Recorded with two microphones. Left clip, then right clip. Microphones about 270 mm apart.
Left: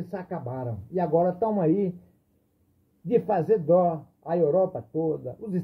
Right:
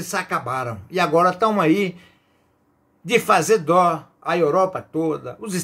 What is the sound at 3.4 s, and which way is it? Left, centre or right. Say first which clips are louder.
Speech: right 5 dB; right.